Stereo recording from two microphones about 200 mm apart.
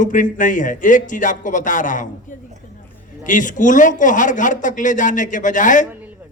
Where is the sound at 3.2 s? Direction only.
40° left (ahead or behind).